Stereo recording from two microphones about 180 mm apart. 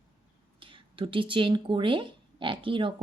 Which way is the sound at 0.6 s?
30° right (ahead or behind).